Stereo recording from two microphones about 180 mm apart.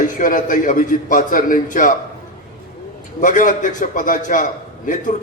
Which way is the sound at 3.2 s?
45° left (ahead or behind).